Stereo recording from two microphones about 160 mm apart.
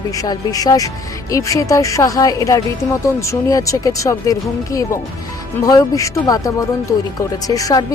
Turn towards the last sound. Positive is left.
turn(degrees=20)  # may be behind; listen again after turning